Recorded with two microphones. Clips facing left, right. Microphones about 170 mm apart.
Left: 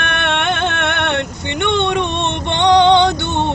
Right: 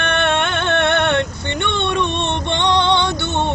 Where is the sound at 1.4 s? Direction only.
15° left (ahead or behind).